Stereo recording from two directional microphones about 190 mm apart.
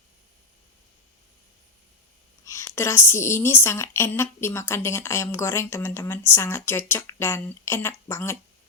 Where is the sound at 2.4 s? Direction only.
15° left (ahead or behind).